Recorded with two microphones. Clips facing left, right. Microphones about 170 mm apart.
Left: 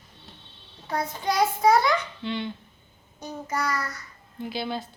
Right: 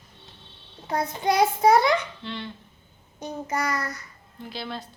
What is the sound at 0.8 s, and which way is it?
Child singing, 20° right (ahead or behind).